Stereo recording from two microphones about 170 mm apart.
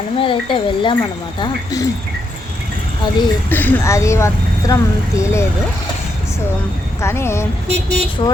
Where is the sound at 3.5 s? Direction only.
10° left (ahead or behind).